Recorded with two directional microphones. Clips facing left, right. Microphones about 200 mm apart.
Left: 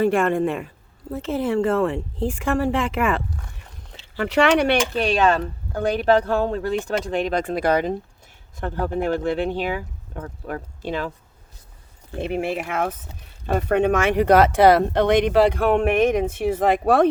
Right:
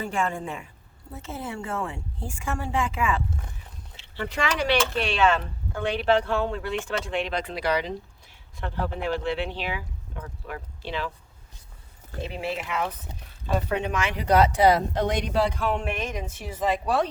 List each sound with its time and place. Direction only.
0.0 s speech: 70° left (ahead or behind)
1.1 s speech: 90° left; by 3.2 s 60° left (ahead or behind)
3.9 s speech: 80° left; by 4.8 s 60° left (ahead or behind)
4.9 s speech: 40° left (ahead or behind)
12.2 s speech: 55° left (ahead or behind)